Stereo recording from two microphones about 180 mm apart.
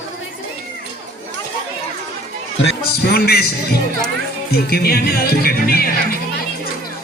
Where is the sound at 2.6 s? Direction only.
60° left (ahead or behind).